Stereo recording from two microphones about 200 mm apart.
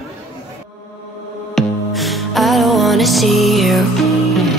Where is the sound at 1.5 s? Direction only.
Centre (ahead or behind).